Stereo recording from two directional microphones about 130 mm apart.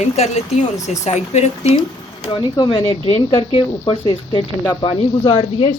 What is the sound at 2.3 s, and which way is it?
Speech, 35° left (ahead or behind).